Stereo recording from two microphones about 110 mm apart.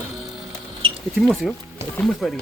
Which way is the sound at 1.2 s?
5° left (ahead or behind).